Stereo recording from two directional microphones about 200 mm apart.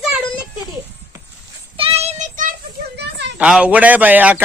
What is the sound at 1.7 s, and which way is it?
Child singing, 30° right (ahead or behind).